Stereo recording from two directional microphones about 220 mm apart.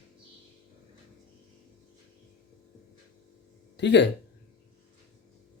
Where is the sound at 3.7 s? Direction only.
50° left (ahead or behind).